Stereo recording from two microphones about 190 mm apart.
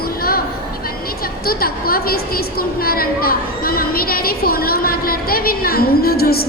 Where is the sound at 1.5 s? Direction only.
50° left (ahead or behind).